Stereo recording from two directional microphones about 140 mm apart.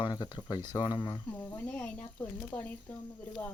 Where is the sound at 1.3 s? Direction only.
15° left (ahead or behind).